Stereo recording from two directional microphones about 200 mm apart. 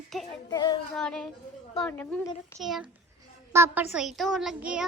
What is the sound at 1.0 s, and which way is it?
A child's voice, 5° left (ahead or behind).